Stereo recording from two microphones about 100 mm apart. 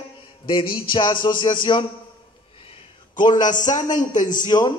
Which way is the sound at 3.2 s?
45° left (ahead or behind).